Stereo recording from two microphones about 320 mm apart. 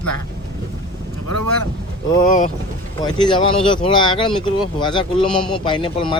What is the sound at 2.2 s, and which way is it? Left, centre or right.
Speech, left.